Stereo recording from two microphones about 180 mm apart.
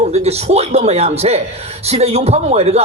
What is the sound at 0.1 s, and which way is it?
A man's voice, 35° right (ahead or behind).